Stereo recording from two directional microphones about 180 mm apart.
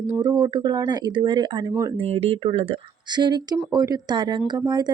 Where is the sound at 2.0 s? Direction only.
30° right (ahead or behind).